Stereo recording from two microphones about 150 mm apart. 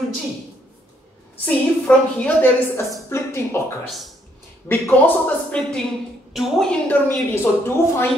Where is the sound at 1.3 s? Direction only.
10° left (ahead or behind).